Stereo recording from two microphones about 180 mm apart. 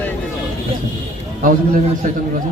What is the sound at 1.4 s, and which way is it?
Speech, 50° right (ahead or behind).